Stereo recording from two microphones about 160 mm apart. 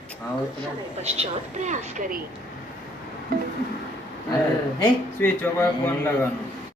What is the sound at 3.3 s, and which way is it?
Music, 65° right (ahead or behind).